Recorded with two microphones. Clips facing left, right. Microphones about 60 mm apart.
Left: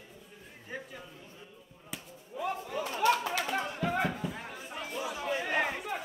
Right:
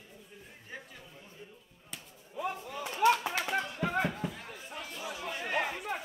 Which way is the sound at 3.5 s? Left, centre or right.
Centre.